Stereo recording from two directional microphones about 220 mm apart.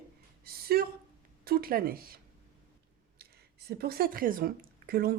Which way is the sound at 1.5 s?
40° right (ahead or behind).